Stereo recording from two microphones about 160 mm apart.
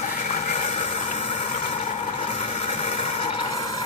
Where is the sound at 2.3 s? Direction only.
40° left (ahead or behind).